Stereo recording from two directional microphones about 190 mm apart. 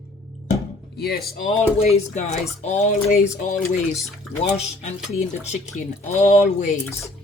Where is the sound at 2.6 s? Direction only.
35° left (ahead or behind).